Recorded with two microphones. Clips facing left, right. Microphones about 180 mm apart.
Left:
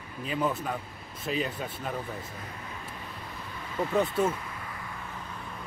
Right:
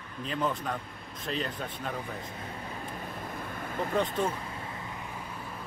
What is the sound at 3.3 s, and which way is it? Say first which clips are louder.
Vehicle: right 4 dB; 50° right (ahead or behind).